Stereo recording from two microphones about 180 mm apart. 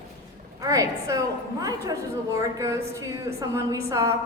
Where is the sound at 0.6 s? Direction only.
20° right (ahead or behind).